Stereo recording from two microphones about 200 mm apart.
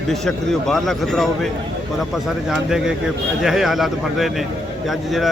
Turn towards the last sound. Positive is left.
turn(degrees=0)  # may be behind; listen again after turning